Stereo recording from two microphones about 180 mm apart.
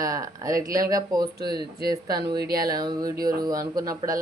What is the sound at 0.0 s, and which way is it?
Speech, 20° right (ahead or behind).